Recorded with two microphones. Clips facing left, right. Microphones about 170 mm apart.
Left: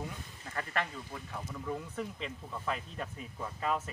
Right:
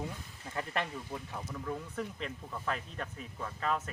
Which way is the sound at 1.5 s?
5° left (ahead or behind).